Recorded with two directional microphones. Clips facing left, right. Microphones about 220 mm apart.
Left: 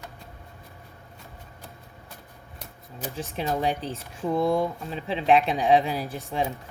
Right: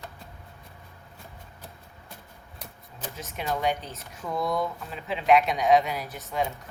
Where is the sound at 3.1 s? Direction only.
30° left (ahead or behind).